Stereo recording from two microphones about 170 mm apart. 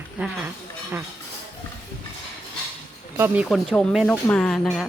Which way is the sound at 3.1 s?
10° right (ahead or behind).